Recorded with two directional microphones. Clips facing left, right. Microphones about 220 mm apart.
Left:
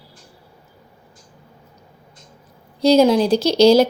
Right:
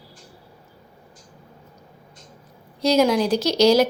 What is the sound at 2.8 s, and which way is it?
Speech, 30° left (ahead or behind).